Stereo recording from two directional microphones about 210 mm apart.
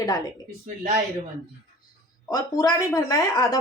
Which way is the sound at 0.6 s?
30° right (ahead or behind).